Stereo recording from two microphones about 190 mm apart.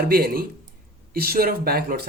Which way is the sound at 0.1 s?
55° right (ahead or behind).